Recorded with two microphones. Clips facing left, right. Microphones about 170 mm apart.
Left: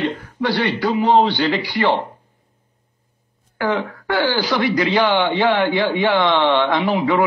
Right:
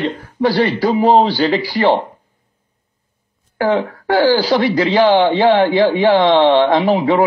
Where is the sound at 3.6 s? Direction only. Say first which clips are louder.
Right 5 dB; 35° right (ahead or behind).